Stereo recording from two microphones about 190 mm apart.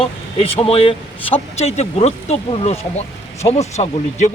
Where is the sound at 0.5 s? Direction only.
30° left (ahead or behind).